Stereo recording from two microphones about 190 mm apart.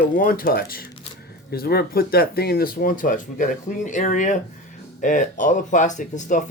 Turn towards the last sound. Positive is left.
turn(degrees=45)  # may be behind; listen again after turning